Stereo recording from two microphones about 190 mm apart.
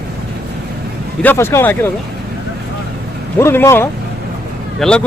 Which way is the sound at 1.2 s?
10° left (ahead or behind).